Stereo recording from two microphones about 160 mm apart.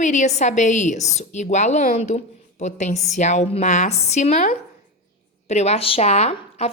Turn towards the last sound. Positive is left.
turn(degrees=45)  # may be behind; listen again after turning